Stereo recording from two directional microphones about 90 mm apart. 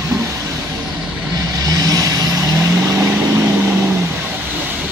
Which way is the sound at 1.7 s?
45° right (ahead or behind).